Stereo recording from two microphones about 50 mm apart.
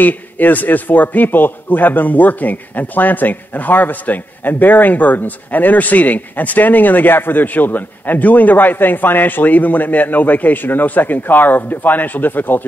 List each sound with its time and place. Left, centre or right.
0.0 s a man's voice: left